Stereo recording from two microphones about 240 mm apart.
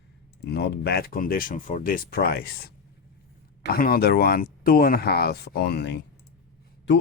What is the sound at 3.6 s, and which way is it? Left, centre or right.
Speech, left.